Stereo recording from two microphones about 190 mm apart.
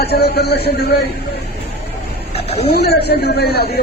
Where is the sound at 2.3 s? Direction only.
30° left (ahead or behind).